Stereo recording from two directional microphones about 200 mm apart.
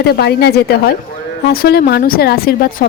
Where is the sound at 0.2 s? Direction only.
55° left (ahead or behind).